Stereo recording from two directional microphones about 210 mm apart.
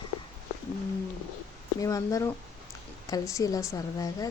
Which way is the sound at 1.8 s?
15° left (ahead or behind).